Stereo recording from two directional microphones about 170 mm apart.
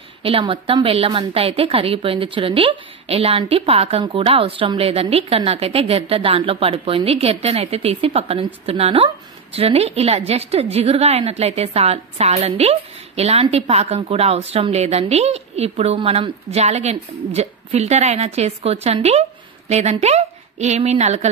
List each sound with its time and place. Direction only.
0.2 s a woman's voice: 35° right (ahead or behind)